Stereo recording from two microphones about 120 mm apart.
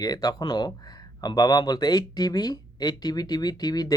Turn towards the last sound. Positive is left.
turn(degrees=35)  # may be behind; listen again after turning